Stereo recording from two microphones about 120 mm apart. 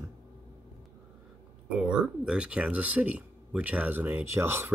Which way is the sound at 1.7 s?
5° right (ahead or behind).